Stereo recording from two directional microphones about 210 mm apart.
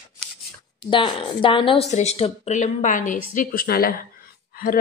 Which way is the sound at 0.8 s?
25° left (ahead or behind).